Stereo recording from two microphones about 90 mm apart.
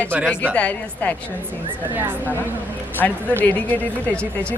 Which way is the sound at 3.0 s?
15° left (ahead or behind).